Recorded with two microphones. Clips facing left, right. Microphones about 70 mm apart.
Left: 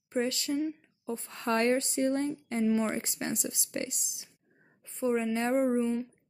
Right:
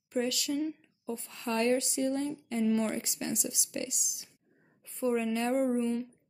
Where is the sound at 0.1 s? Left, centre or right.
Left.